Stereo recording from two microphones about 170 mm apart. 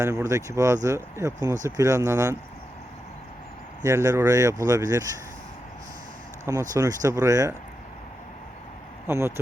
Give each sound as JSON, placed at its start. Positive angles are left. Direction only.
{"t": 0.0, "sound": "speech", "side_deg": -15}
{"t": 3.8, "sound": "speech", "side_deg": -20}
{"t": 6.4, "sound": "speech", "side_deg": -20}
{"t": 9.0, "sound": "speech", "side_deg": -15}